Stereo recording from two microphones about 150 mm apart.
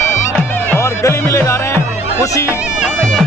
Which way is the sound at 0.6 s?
20° left (ahead or behind).